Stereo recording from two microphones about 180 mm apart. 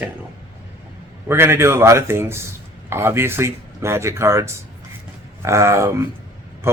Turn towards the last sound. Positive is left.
turn(degrees=-15)  # may be behind; listen again after turning